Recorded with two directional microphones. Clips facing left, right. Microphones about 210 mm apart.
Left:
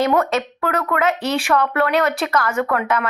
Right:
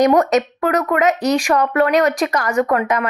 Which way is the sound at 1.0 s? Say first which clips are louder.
Right 4 dB; 40° right (ahead or behind).